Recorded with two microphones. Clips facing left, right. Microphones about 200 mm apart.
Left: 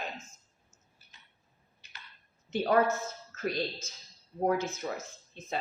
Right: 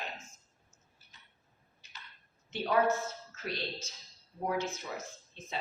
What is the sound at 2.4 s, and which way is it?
A woman's voice, 50° left (ahead or behind).